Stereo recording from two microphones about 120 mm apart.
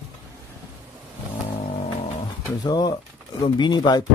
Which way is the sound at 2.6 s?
35° left (ahead or behind).